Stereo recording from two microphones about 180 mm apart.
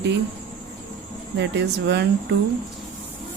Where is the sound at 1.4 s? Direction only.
75° right (ahead or behind).